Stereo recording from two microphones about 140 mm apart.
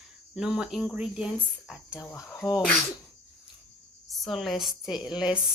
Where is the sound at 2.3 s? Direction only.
25° left (ahead or behind).